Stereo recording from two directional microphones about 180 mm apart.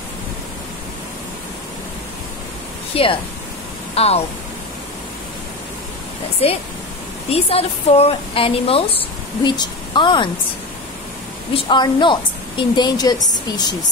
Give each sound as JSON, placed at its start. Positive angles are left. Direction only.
{"t": 2.9, "sound": "speech", "side_deg": 30}
{"t": 6.4, "sound": "speech", "side_deg": 35}
{"t": 11.5, "sound": "a woman's voice", "side_deg": 25}